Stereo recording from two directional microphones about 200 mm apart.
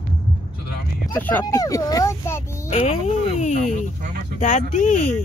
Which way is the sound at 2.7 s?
30° left (ahead or behind).